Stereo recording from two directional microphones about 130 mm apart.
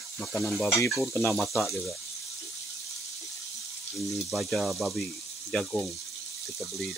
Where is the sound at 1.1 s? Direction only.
15° left (ahead or behind).